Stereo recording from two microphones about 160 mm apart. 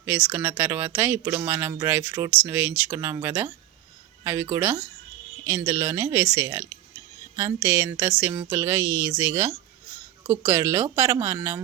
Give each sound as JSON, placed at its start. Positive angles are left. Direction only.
{"t": 0.0, "sound": "speech", "side_deg": -10}